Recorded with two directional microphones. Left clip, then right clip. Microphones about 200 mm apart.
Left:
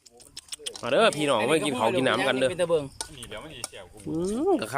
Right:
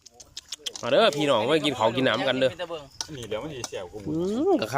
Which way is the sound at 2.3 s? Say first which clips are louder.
Right 1 dB; centre (ahead or behind).